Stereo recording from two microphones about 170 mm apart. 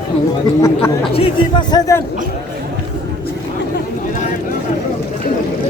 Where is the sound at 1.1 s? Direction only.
30° left (ahead or behind).